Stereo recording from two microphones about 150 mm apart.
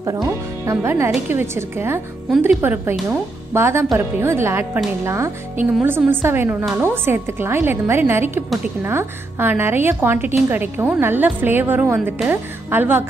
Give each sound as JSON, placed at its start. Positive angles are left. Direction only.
{"t": 0.0, "sound": "a woman's voice", "side_deg": -25}